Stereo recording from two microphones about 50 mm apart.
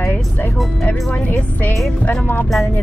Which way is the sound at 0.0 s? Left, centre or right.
Left.